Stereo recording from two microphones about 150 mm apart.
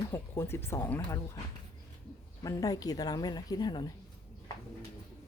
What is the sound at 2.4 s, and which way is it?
Speech, 25° left (ahead or behind).